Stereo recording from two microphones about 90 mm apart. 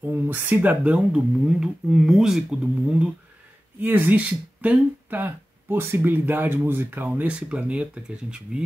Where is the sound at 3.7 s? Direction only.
20° right (ahead or behind).